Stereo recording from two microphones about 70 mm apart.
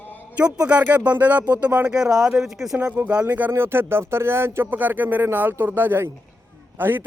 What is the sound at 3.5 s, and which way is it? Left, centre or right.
A man's voice, right.